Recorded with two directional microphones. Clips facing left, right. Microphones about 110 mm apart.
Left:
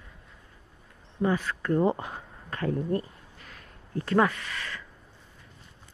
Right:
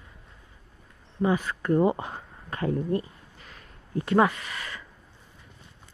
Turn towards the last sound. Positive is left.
turn(degrees=-15)  # may be behind; listen again after turning